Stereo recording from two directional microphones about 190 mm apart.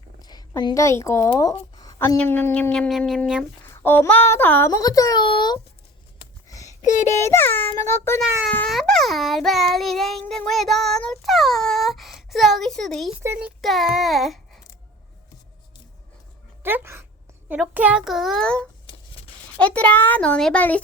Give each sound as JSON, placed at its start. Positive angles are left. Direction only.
{"t": 0.2, "sound": "a woman's voice", "side_deg": 20}
{"t": 1.4, "sound": "a sound", "side_deg": 20}
{"t": 2.2, "sound": "a child's voice", "side_deg": 10}
{"t": 6.8, "sound": "a child's voice", "side_deg": 40}
{"t": 7.1, "sound": "a child's voice", "side_deg": 15}
{"t": 8.4, "sound": "child singing", "side_deg": 5}
{"t": 13.4, "sound": "speech", "side_deg": 0}
{"t": 16.6, "sound": "a child's voice", "side_deg": -10}